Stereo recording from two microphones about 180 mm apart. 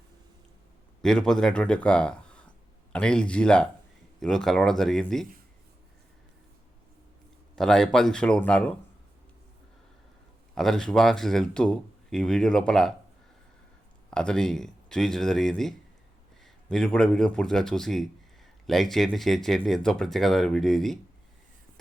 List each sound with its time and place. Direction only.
1.0 s speech: 5° left (ahead or behind)
7.5 s speech: 5° left (ahead or behind)
10.5 s speech: centre (ahead or behind)
14.1 s speech: 5° left (ahead or behind)